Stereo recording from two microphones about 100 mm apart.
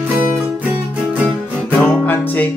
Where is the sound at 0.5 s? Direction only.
15° right (ahead or behind).